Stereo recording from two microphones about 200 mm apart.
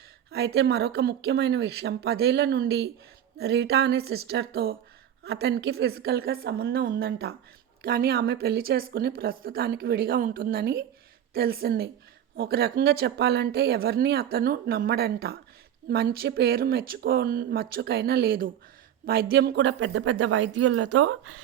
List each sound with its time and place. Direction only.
0.3 s a woman's voice: 55° right (ahead or behind); by 21.4 s 90° right